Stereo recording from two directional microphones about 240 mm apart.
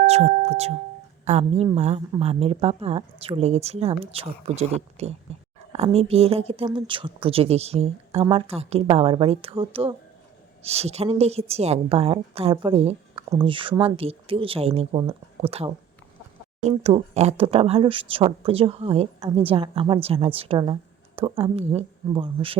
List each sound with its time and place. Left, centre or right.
0.0 s speech: right